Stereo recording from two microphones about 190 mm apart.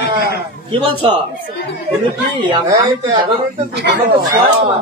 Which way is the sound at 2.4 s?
25° right (ahead or behind).